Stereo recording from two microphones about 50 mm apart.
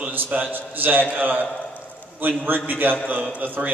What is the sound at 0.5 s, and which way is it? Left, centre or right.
A man's voice, right.